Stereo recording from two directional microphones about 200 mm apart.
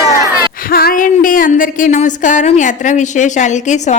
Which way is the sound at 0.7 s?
45° left (ahead or behind).